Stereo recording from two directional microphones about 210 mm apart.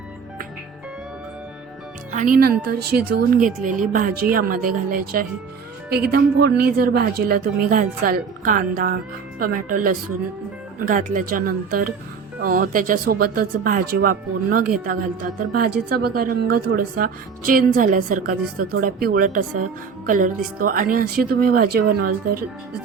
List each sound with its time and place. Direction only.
2.1 s speech: 40° right (ahead or behind)